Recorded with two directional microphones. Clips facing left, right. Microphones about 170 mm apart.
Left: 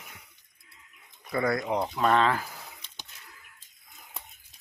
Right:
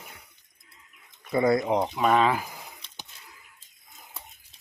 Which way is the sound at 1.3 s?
20° right (ahead or behind).